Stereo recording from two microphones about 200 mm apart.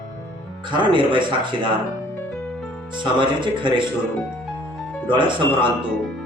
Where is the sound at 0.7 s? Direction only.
25° right (ahead or behind).